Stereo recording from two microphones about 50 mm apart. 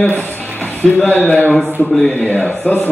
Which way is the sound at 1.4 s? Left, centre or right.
Left.